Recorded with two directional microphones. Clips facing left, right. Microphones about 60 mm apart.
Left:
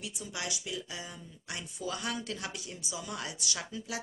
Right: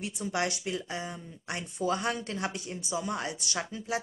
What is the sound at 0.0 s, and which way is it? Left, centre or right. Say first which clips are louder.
Speech: right 8 dB; right.